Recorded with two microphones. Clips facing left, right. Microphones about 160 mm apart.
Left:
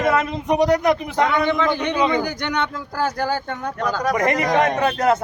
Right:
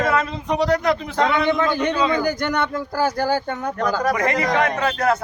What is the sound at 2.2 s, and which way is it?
Speech, 5° right (ahead or behind).